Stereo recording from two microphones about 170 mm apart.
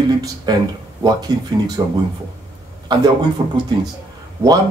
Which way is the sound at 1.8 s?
25° right (ahead or behind).